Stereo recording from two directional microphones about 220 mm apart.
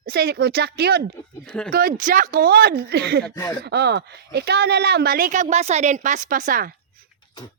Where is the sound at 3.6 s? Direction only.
50° right (ahead or behind).